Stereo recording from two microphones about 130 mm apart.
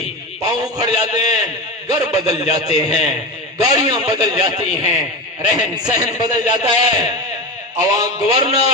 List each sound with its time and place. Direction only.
0.4 s a man's voice: 30° right (ahead or behind)
6.2 s a man's voice: 85° left
6.5 s a man's voice: 30° right (ahead or behind)